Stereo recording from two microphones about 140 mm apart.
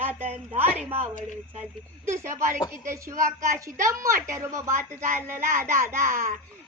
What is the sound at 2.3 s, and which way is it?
Speech, 70° right (ahead or behind).